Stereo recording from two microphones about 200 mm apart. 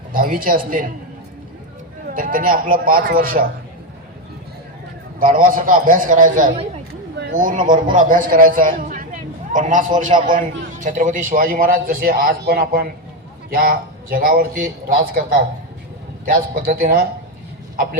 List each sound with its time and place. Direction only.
0.1 s a man's voice: 45° right (ahead or behind)
2.0 s a man's voice: 45° right (ahead or behind)
5.2 s a man's voice: 45° right (ahead or behind)